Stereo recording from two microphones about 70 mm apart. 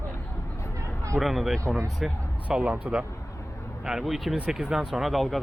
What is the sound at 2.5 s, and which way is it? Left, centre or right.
Speech, centre.